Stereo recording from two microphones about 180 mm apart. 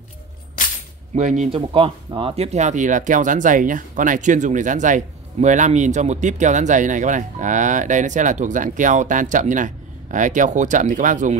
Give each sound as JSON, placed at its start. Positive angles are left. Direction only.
{"t": 1.1, "sound": "speech", "side_deg": -40}